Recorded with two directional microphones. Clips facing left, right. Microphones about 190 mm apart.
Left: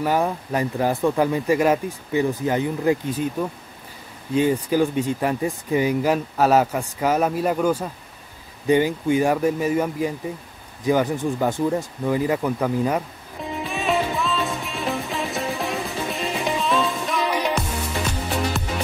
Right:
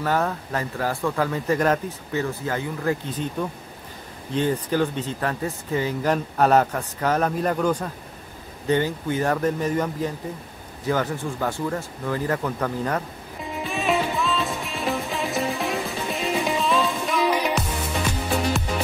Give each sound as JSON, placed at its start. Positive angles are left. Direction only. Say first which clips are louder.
{"t": 0.0, "sound": "speech", "louder": "left 2 dB", "side_deg": 10}
{"t": 13.7, "sound": "music", "louder": "even", "side_deg": 0}